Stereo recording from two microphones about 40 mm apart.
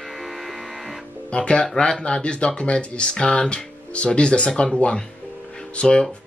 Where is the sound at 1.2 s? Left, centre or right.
Left.